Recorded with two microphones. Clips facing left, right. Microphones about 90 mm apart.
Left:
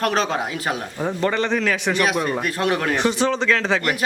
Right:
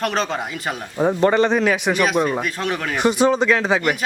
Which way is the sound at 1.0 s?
25° right (ahead or behind).